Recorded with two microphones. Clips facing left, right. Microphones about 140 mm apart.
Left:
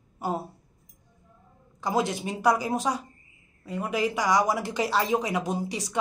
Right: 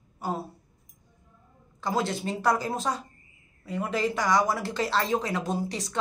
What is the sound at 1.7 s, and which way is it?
Speech, 15° left (ahead or behind).